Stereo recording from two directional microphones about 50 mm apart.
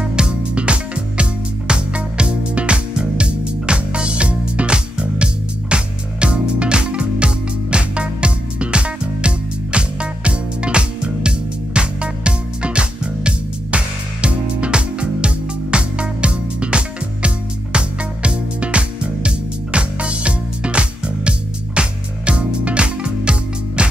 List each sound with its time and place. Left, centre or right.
0.0 s music: centre